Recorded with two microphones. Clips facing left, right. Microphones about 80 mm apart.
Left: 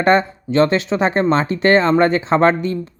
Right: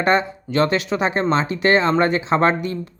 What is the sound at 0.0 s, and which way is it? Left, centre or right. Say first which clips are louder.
Speech: left 4 dB; left.